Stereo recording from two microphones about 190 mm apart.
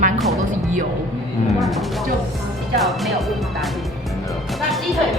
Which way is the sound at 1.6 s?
Centre (ahead or behind).